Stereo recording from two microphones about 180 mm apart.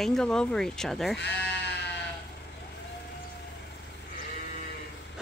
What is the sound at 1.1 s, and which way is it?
Sheep, 70° left (ahead or behind).